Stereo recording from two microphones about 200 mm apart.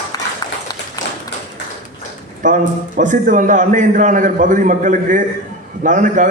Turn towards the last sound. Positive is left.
turn(degrees=-40)  # may be behind; listen again after turning